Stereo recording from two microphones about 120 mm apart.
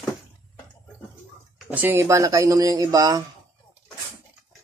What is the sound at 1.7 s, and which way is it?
Speech, 15° right (ahead or behind).